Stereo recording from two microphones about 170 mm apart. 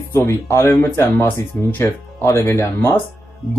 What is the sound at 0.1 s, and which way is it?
Speech, 15° left (ahead or behind).